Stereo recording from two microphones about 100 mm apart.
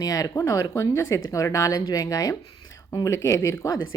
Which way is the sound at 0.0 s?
40° left (ahead or behind).